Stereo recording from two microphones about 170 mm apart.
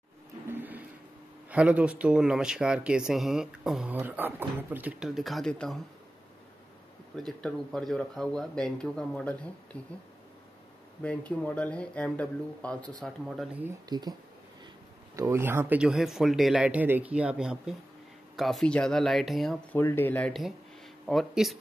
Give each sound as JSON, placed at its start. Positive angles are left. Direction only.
{"t": 0.5, "sound": "a sound", "side_deg": -10}
{"t": 1.5, "sound": "speech", "side_deg": -10}
{"t": 7.2, "sound": "speech", "side_deg": 5}
{"t": 11.0, "sound": "speech", "side_deg": 10}
{"t": 13.8, "sound": "speech", "side_deg": -25}
{"t": 15.1, "sound": "speech", "side_deg": -15}
{"t": 19.7, "sound": "speech", "side_deg": 10}